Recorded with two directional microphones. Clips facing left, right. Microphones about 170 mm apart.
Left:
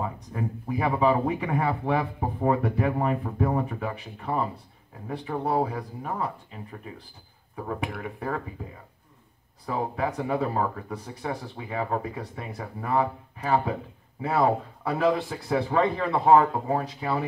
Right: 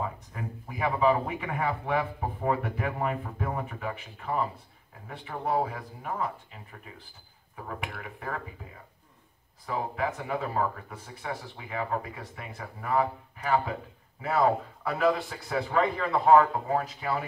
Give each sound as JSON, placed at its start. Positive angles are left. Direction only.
{"t": 0.0, "sound": "speech", "side_deg": 35}
{"t": 7.5, "sound": "speech", "side_deg": 35}
{"t": 9.7, "sound": "a man's voice", "side_deg": 35}